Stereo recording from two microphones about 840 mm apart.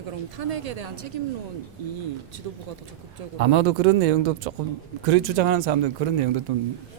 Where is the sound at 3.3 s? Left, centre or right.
Right.